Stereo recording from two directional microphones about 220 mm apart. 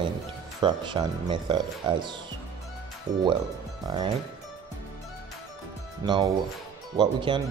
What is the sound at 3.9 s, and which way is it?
Speech, 20° right (ahead or behind).